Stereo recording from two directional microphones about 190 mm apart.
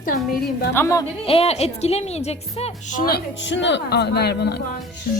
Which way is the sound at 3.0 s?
55° left (ahead or behind).